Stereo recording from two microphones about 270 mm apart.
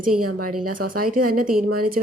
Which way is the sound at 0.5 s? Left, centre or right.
Right.